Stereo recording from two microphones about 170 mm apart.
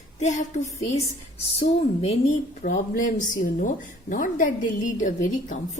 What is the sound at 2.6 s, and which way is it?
A woman's voice, 55° left (ahead or behind).